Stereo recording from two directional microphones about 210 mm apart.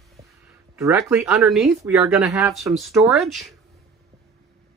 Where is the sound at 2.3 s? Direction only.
15° right (ahead or behind).